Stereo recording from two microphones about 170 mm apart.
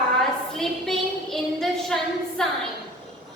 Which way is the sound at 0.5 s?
Centre (ahead or behind).